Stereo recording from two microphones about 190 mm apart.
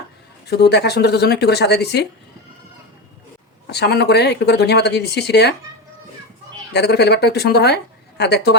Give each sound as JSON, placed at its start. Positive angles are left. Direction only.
{"t": 0.5, "sound": "speech", "side_deg": 60}
{"t": 3.7, "sound": "speech", "side_deg": 60}
{"t": 6.7, "sound": "speech", "side_deg": 60}